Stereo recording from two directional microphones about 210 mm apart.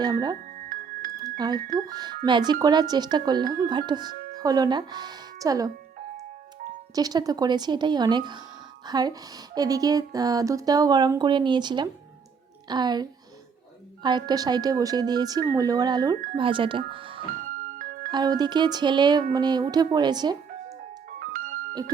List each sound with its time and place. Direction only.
0.0 s speech: 20° right (ahead or behind)
0.7 s music: 40° right (ahead or behind)
1.1 s music: 20° right (ahead or behind)
1.9 s speech: 20° right (ahead or behind)
6.9 s speech: 20° right (ahead or behind)
17.6 s music: 40° right (ahead or behind)
18.1 s speech: 20° right (ahead or behind)
20.7 s music: 40° right (ahead or behind)